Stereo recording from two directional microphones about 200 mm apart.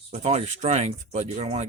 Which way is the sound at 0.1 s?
35° right (ahead or behind).